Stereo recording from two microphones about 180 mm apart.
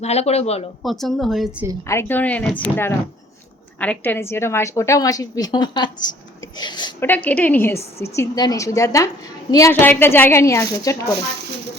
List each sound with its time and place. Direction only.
0.0 s speech: 35° left (ahead or behind)
0.8 s a woman's voice: centre (ahead or behind)
1.9 s a woman's voice: 10° left (ahead or behind)
3.8 s a woman's voice: 10° left (ahead or behind)
7.0 s a woman's voice: 10° left (ahead or behind)